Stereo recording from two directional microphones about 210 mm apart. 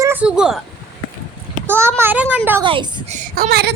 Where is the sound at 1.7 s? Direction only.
10° right (ahead or behind).